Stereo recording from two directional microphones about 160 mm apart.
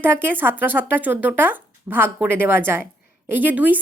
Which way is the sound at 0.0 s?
10° right (ahead or behind).